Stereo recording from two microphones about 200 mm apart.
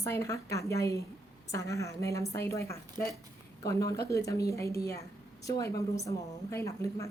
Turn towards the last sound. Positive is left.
turn(degrees=15)  # may be behind; listen again after turning